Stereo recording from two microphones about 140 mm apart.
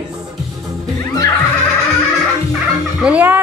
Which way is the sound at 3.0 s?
10° right (ahead or behind).